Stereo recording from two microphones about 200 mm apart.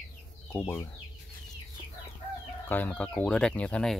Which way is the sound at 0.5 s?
10° left (ahead or behind).